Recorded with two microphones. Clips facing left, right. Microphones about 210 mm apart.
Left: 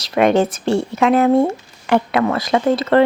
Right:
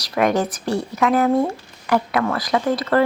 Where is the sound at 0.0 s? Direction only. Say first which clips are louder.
Left 5 dB; 25° left (ahead or behind).